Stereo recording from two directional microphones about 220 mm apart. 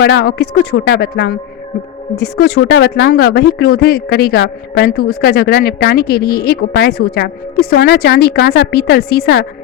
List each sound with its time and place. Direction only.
0.0 s speech: 50° left (ahead or behind)